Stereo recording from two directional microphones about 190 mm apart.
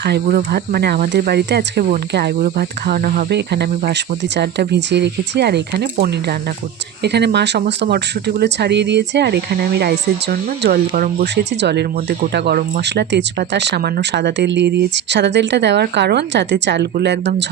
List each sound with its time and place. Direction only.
0.0 s speech: 55° right (ahead or behind)